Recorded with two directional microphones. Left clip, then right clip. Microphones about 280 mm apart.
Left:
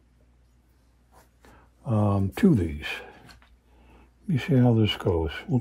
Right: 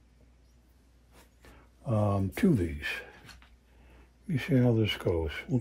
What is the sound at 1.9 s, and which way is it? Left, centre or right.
Speech, centre.